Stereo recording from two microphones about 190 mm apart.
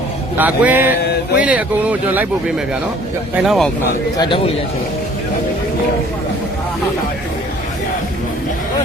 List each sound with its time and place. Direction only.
0.3 s speech: 10° right (ahead or behind)
3.3 s speech: centre (ahead or behind)
4.2 s a man's voice: 25° left (ahead or behind)